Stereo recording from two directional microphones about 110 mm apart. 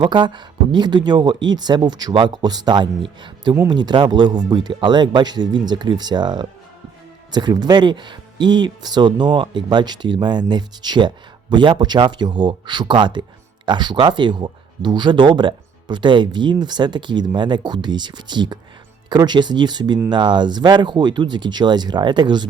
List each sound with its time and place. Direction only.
0.0 s speech: 45° right (ahead or behind)